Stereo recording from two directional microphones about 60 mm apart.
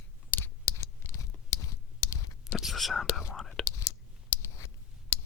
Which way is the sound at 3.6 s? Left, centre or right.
Left.